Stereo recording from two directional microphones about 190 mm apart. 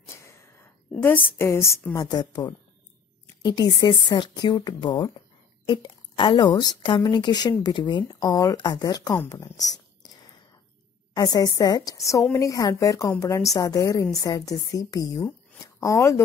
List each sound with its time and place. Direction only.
0.2 s a sound: 15° left (ahead or behind)
1.4 s a woman's voice: 15° left (ahead or behind)
11.3 s a woman's voice: 20° left (ahead or behind)